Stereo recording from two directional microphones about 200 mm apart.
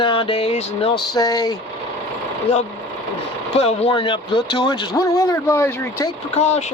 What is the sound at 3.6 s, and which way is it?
Speech, 30° left (ahead or behind).